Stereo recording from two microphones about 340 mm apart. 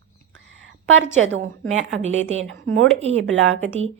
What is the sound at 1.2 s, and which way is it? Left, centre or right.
A woman's voice, right.